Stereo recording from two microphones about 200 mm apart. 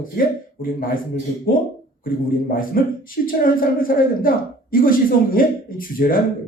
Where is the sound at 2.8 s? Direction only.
45° left (ahead or behind).